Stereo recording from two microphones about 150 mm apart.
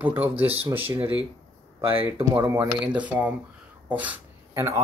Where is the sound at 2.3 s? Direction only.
10° right (ahead or behind).